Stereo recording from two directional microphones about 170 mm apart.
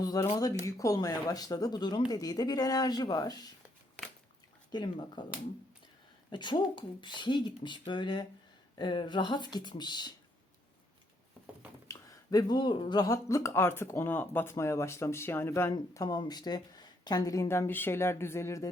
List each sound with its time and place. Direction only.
0.0 s speech: 20° left (ahead or behind)
4.0 s a sound: 10° left (ahead or behind)
4.7 s speech: 25° left (ahead or behind)
6.3 s speech: 25° left (ahead or behind)
11.9 s speech: 20° left (ahead or behind)